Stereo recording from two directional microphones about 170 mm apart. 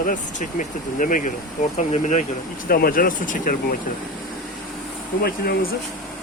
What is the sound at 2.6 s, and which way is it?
Speech, 60° left (ahead or behind).